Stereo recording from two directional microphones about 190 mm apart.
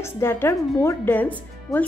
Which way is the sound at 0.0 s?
10° left (ahead or behind).